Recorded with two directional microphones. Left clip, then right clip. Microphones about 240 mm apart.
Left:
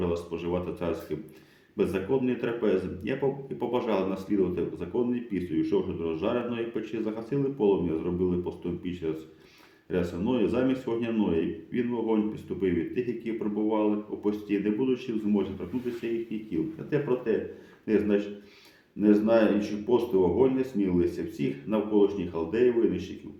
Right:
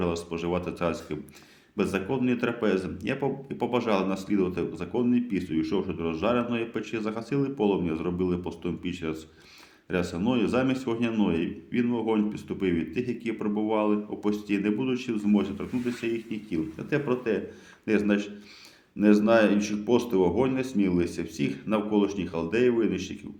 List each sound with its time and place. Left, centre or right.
0.0 s speech: right